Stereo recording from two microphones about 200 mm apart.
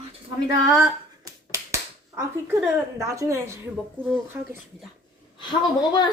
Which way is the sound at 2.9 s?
15° right (ahead or behind).